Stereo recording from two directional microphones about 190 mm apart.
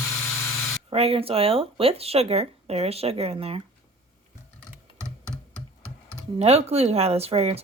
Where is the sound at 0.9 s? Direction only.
30° right (ahead or behind).